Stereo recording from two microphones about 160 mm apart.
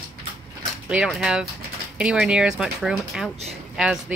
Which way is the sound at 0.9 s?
5° right (ahead or behind).